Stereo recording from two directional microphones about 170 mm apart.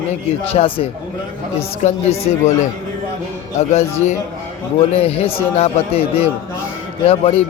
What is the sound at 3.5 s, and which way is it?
A man's voice, 40° left (ahead or behind).